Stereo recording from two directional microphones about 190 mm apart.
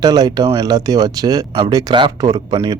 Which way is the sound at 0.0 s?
20° right (ahead or behind).